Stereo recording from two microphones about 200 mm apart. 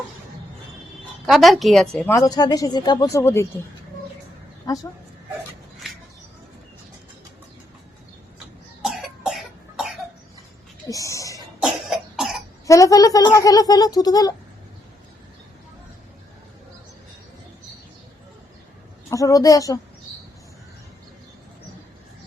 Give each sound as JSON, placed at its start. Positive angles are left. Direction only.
{"t": 1.3, "sound": "speech", "side_deg": 0}
{"t": 2.1, "sound": "speech", "side_deg": 15}
{"t": 4.6, "sound": "a woman's voice", "side_deg": 20}
{"t": 8.8, "sound": "cough", "side_deg": 0}
{"t": 10.8, "sound": "a sound", "side_deg": 15}
{"t": 11.6, "sound": "cough", "side_deg": 0}
{"t": 12.6, "sound": "speech", "side_deg": 15}
{"t": 19.1, "sound": "speech", "side_deg": 15}